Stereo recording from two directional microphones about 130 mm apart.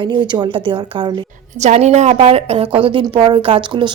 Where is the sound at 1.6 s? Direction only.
60° right (ahead or behind).